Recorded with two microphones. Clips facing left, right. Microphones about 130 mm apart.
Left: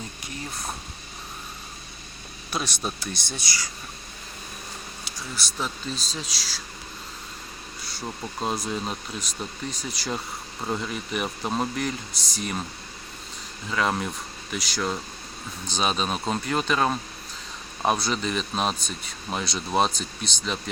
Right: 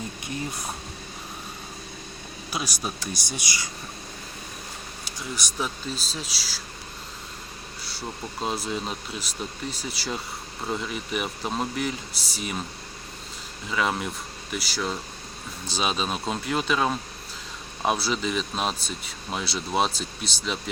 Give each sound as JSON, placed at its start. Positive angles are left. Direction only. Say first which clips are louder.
{"t": 2.5, "sound": "speech", "louder": "left 1 dB", "side_deg": -5}
{"t": 3.3, "sound": "speech", "louder": "right 1 dB", "side_deg": -20}
{"t": 5.5, "sound": "speech", "louder": "even", "side_deg": -10}
{"t": 8.0, "sound": "speech", "louder": "left 1 dB", "side_deg": 0}
{"t": 13.7, "sound": "speech", "louder": "left 1 dB", "side_deg": 0}